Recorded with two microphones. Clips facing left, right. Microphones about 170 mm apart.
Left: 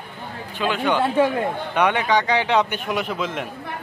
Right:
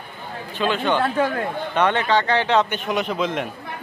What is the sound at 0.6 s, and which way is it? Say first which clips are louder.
A man's voice: even; 10° left (ahead or behind).